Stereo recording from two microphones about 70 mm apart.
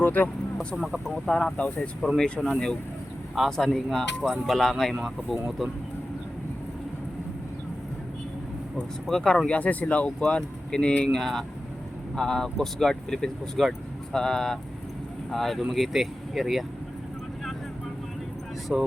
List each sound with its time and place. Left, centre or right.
0.0 s speech: left
1.3 s speech: centre
3.3 s speech: centre
9.0 s speech: centre
18.7 s speech: centre